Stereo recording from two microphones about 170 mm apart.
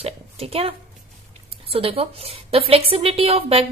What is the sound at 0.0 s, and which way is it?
A woman's voice, 35° right (ahead or behind).